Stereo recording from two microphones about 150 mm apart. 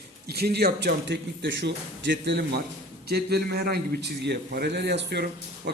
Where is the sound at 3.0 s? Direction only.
90° right.